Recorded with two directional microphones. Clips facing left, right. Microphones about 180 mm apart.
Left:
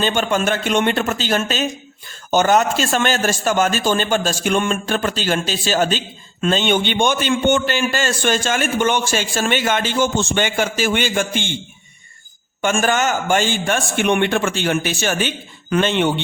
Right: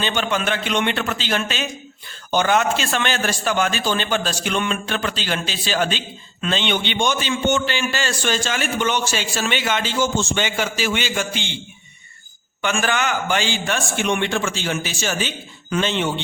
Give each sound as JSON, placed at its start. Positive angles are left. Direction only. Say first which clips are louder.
{"t": 0.0, "sound": "a man's voice", "louder": "left 4 dB", "side_deg": 45}
{"t": 12.6, "sound": "a man's voice", "louder": "left 4 dB", "side_deg": 45}